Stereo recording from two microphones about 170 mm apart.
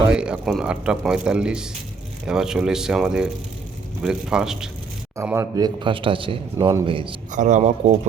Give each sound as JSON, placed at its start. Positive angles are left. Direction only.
{"t": 0.1, "sound": "a man's voice", "side_deg": -5}
{"t": 5.1, "sound": "a man's voice", "side_deg": -15}
{"t": 6.6, "sound": "a man's voice", "side_deg": -20}
{"t": 6.8, "sound": "a man's voice", "side_deg": -30}
{"t": 7.3, "sound": "speech", "side_deg": -45}